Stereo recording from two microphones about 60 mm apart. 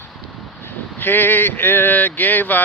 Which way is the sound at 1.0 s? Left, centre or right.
Left.